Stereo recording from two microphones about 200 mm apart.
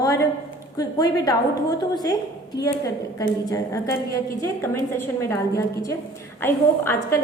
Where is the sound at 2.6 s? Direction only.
15° left (ahead or behind).